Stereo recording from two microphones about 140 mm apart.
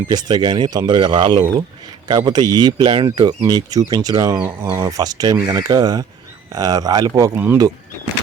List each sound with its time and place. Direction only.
0.1 s speech: 30° right (ahead or behind)
4.4 s speech: 15° right (ahead or behind)
7.3 s speech: 15° right (ahead or behind)